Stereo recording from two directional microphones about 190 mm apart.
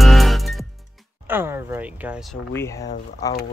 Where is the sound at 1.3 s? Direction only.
10° right (ahead or behind).